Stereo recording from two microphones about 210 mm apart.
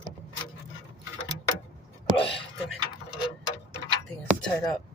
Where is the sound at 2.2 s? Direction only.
25° left (ahead or behind).